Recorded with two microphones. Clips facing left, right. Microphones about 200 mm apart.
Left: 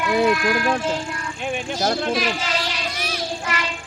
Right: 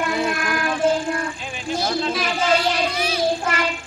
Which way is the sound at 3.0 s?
50° left (ahead or behind).